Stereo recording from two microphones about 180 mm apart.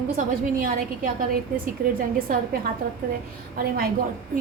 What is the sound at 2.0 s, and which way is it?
Speech, 50° right (ahead or behind).